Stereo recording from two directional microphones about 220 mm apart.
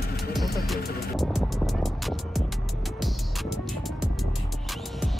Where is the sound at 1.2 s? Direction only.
Centre (ahead or behind).